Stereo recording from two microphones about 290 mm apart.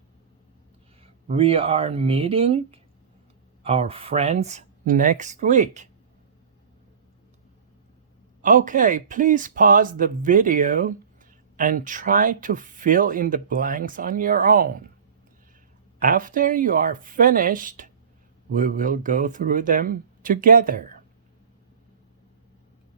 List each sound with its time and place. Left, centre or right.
1.0 s speech: centre
8.4 s speech: right
16.0 s speech: right